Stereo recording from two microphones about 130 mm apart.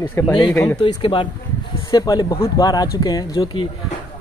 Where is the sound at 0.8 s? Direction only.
40° left (ahead or behind).